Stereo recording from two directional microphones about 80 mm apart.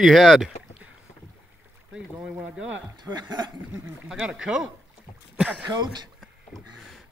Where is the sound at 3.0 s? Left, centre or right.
Right.